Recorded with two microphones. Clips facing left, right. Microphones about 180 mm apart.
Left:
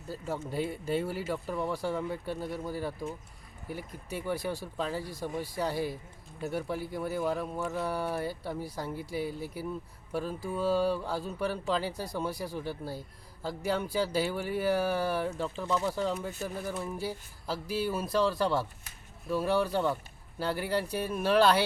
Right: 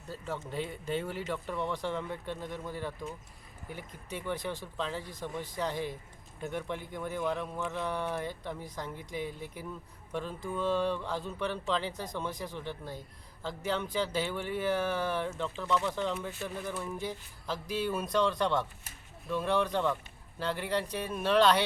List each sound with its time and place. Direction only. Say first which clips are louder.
0.3 s speech: left 4 dB; 40° left (ahead or behind)
0.9 s a man's voice: left 1 dB; 10° left (ahead or behind)
15.5 s speech: right 1 dB; 35° left (ahead or behind)
15.9 s a man's voice: left 2 dB; 10° left (ahead or behind)